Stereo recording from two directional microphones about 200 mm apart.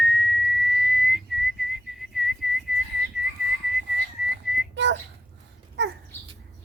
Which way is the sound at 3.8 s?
60° right (ahead or behind).